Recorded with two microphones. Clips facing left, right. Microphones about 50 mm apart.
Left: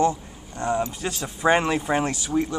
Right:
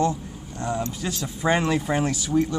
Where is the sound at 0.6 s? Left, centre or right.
Left.